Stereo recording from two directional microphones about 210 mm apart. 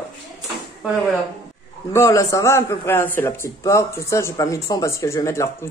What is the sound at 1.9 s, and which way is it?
A man's voice, 15° left (ahead or behind).